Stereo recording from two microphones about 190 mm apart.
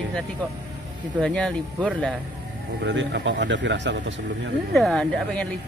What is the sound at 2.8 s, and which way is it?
Speech, 70° right (ahead or behind).